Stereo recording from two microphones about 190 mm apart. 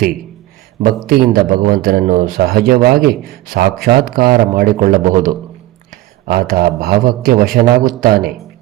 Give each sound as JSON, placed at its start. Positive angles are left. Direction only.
{"t": 1.0, "sound": "speech", "side_deg": -50}